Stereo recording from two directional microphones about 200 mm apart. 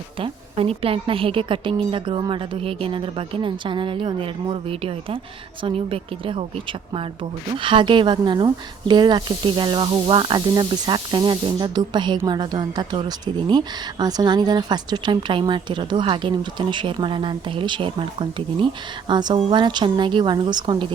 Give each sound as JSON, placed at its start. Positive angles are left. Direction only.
{"t": 0.2, "sound": "speech", "side_deg": -30}
{"t": 7.6, "sound": "speech", "side_deg": -25}